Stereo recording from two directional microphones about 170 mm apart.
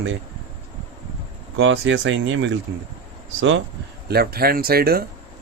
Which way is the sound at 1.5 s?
90° right.